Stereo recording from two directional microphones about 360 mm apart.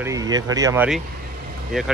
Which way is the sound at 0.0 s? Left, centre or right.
Centre.